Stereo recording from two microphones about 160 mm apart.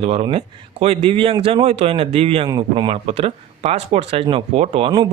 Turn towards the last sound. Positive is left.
turn(degrees=-35)  # may be behind; listen again after turning